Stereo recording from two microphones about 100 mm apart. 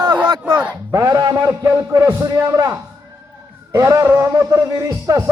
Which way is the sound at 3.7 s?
30° right (ahead or behind).